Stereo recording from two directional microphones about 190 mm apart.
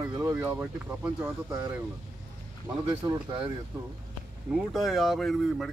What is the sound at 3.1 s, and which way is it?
Speech, 25° right (ahead or behind).